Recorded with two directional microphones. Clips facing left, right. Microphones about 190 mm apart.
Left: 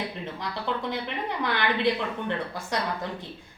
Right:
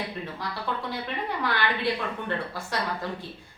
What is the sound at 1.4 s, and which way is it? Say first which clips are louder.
A woman's voice: left 2 dB; 20° left (ahead or behind).